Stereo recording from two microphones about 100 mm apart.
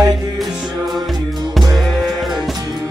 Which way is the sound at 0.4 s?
Centre (ahead or behind).